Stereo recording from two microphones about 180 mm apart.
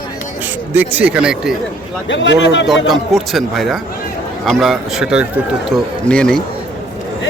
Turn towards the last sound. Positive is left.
turn(degrees=5)  # may be behind; listen again after turning